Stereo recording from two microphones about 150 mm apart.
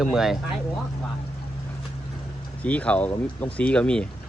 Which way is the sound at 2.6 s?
10° left (ahead or behind).